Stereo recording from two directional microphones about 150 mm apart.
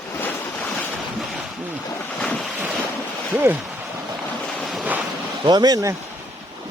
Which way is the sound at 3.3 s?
15° right (ahead or behind).